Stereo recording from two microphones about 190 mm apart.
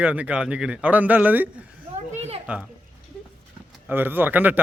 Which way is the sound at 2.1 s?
35° right (ahead or behind).